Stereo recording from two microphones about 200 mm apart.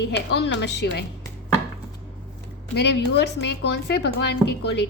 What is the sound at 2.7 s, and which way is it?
A woman's voice, 55° left (ahead or behind).